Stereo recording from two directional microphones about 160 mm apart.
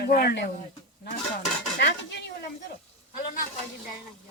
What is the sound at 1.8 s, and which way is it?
Speech, 90° left.